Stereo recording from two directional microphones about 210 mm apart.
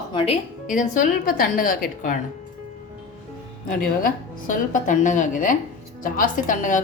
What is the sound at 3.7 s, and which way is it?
A woman's voice, 40° left (ahead or behind).